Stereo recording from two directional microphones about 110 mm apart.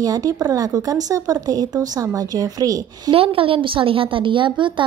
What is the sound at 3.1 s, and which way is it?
A woman's voice, 55° right (ahead or behind).